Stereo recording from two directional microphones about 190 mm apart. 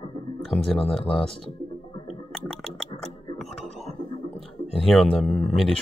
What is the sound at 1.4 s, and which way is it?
Music, 30° left (ahead or behind).